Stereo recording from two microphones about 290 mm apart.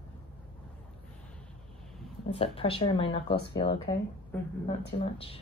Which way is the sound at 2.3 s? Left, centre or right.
Centre.